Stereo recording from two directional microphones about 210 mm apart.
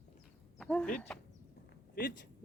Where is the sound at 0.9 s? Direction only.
5° left (ahead or behind).